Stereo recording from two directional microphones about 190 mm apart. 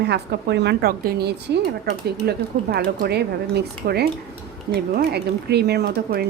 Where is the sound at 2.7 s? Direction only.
55° right (ahead or behind).